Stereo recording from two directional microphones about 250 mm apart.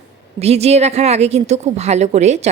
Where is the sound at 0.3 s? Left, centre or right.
Right.